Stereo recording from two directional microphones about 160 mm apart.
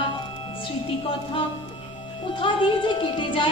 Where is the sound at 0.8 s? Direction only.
35° left (ahead or behind).